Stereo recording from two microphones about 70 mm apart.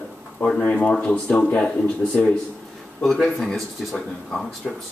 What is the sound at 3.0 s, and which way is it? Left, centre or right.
Speech, centre.